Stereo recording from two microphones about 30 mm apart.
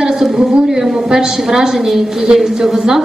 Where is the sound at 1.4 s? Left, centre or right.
Centre.